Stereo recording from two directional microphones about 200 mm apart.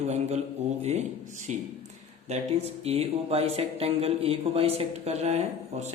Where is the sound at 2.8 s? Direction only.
30° right (ahead or behind).